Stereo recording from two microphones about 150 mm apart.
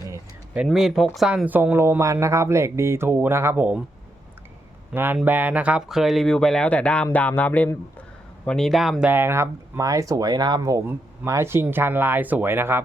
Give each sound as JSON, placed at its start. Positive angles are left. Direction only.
{"t": 0.5, "sound": "speech", "side_deg": -5}
{"t": 4.9, "sound": "speech", "side_deg": -10}